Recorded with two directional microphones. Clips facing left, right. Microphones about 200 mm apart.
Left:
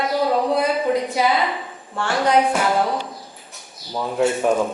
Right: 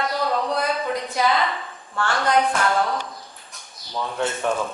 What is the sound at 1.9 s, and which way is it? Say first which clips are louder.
Speech: left 3 dB; 15° left (ahead or behind).